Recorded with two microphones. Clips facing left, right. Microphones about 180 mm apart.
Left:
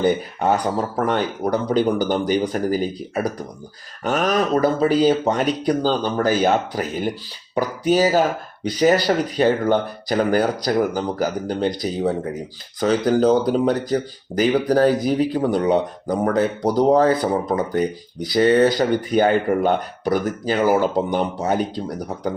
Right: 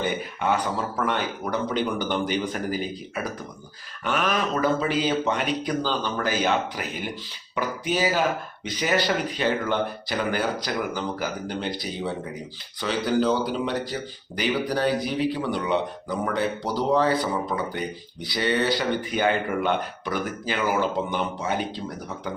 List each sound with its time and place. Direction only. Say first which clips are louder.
0.0 s speech: left 7 dB; 40° left (ahead or behind)